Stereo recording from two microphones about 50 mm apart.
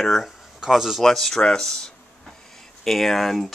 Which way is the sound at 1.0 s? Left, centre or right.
Centre.